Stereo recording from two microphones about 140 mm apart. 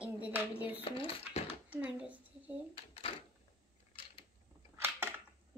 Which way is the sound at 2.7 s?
45° left (ahead or behind).